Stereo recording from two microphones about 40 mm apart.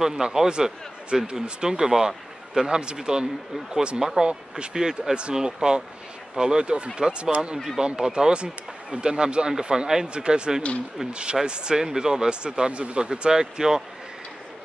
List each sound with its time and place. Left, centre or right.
0.1 s speech: centre; by 7.5 s right
7.5 s speech: centre
7.8 s speech: right